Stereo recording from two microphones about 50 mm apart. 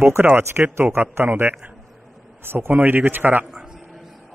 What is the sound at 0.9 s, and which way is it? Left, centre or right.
A man's voice, right.